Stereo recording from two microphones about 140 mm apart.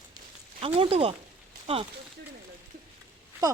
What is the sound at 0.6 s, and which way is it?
Speech, 45° right (ahead or behind).